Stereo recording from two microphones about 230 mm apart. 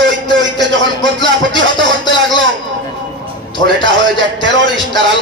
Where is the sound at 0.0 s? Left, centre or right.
Right.